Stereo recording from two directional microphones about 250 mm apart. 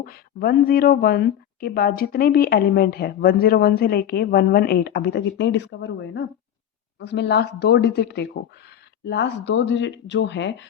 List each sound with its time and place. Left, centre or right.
0.0 s speech: left